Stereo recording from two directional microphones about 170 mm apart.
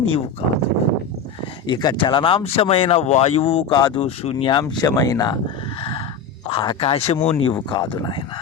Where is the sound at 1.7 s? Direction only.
25° left (ahead or behind).